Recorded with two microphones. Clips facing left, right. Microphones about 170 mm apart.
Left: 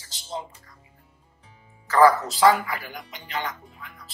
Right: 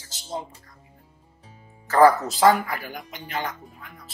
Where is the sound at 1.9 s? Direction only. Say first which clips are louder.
Right 1 dB; 50° right (ahead or behind).